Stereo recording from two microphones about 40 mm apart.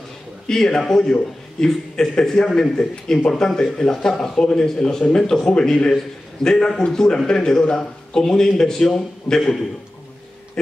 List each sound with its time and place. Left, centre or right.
0.5 s a man's voice: centre